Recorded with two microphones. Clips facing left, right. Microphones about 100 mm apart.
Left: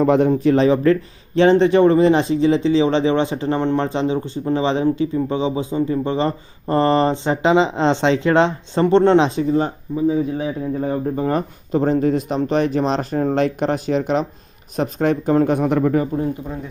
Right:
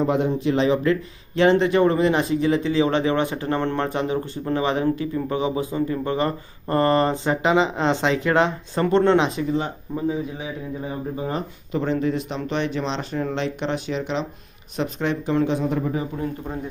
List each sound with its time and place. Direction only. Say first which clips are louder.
0.0 s speech: left 6 dB; 65° left (ahead or behind)
0.3 s speech: left 5 dB; 40° left (ahead or behind); by 16.0 s 60° left (ahead or behind)